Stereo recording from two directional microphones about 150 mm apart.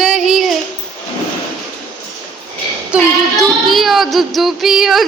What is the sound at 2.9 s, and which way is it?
Speech, 10° right (ahead or behind).